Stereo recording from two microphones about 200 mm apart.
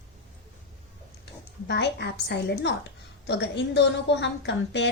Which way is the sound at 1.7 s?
60° left (ahead or behind).